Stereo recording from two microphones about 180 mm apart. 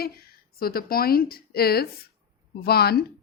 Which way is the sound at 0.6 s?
55° left (ahead or behind).